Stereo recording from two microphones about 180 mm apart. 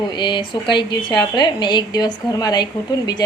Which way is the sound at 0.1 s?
25° left (ahead or behind).